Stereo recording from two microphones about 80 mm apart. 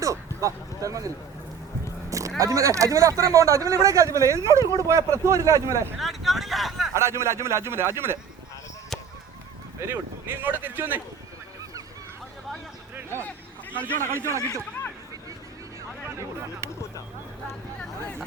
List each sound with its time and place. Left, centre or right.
0.0 s speech: right
2.0 s a sound: right
2.4 s speech: right
6.0 s vehicle: centre
6.9 s speech: right
9.8 s speech: right
13.0 s a sound: right
13.8 s speech: right
16.0 s speech: right